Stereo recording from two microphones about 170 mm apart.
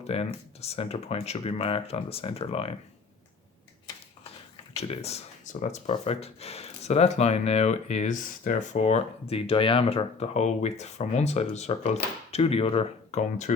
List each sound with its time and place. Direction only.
0.0 s speech: 35° left (ahead or behind)
4.8 s speech: 40° left (ahead or behind)